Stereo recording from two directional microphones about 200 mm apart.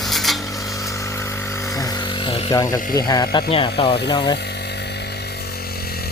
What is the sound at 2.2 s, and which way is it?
Speech, 20° left (ahead or behind).